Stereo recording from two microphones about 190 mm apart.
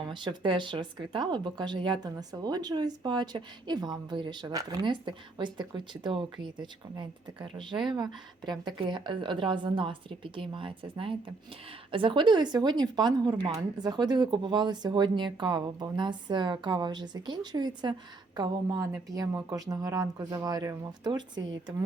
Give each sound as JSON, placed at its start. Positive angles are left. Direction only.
{"t": 0.1, "sound": "speech", "side_deg": -25}